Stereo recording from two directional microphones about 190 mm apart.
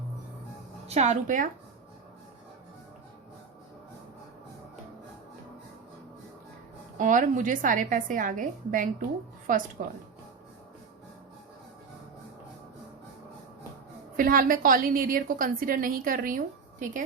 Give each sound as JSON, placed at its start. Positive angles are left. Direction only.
{"t": 0.9, "sound": "speech", "side_deg": -35}
{"t": 7.0, "sound": "a woman's voice", "side_deg": -45}
{"t": 14.2, "sound": "a woman's voice", "side_deg": -45}